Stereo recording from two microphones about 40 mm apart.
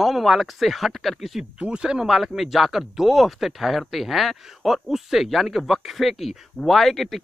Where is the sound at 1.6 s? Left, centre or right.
Right.